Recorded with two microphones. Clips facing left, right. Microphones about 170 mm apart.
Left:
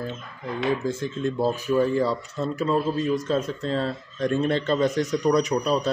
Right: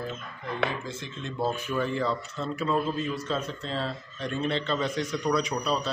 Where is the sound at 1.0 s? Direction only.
40° left (ahead or behind).